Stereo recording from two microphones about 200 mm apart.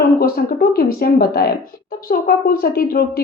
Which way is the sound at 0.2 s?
50° left (ahead or behind).